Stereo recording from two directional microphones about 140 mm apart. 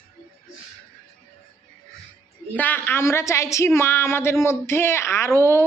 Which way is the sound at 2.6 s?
15° left (ahead or behind).